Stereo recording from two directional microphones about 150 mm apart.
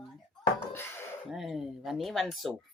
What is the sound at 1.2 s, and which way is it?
Speech, centre (ahead or behind).